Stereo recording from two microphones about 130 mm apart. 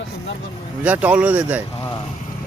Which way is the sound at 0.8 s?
10° right (ahead or behind).